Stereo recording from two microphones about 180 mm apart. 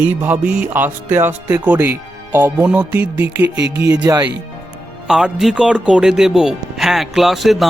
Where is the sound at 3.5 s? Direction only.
75° right (ahead or behind).